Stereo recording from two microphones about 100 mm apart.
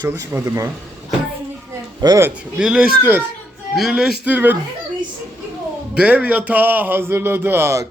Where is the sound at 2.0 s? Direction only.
40° right (ahead or behind).